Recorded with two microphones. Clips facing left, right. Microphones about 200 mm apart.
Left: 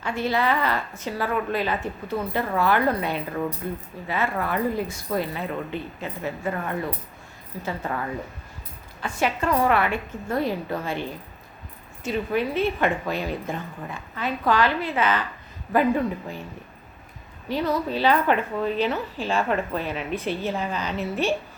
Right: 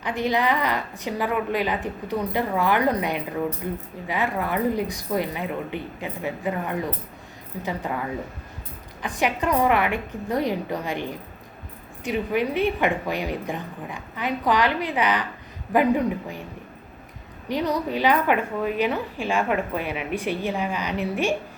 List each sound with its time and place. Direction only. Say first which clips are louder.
0.0 s a woman's voice: right 1 dB; 15° right (ahead or behind)
17.5 s a woman's voice: even; 15° right (ahead or behind)